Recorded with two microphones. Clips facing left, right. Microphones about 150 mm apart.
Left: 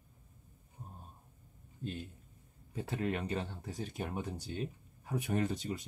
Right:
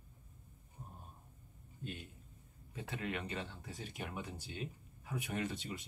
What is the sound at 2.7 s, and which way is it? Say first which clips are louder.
Speech: left 6 dB; 40° left (ahead or behind).